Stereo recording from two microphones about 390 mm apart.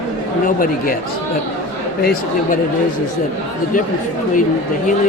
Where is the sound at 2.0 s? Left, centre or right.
Left.